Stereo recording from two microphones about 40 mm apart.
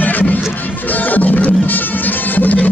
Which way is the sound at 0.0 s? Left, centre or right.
Left.